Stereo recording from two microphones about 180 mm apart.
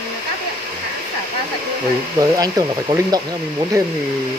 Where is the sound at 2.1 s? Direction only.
20° right (ahead or behind).